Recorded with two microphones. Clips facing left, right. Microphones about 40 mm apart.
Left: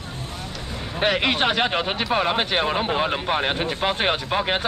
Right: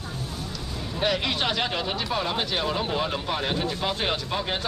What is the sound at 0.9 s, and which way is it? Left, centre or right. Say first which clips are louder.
Speech: left 5 dB; left.